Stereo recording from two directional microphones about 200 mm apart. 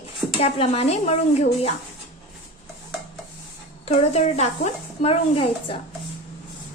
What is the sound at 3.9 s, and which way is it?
A woman's voice, 35° left (ahead or behind).